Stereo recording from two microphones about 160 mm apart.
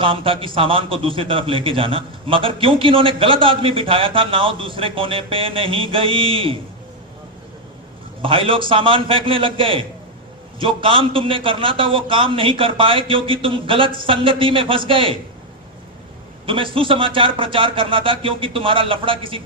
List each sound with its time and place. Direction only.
0.0 s a man's voice: 35° right (ahead or behind)
8.2 s a man's voice: 35° right (ahead or behind)
16.5 s a man's voice: 35° right (ahead or behind)